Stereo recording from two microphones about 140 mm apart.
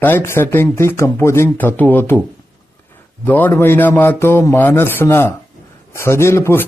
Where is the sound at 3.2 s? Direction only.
15° left (ahead or behind).